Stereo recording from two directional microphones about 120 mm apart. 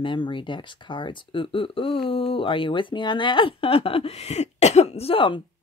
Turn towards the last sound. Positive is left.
turn(degrees=45)  # may be behind; listen again after turning